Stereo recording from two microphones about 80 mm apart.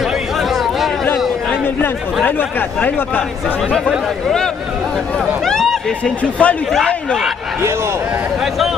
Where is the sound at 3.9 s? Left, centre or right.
Centre.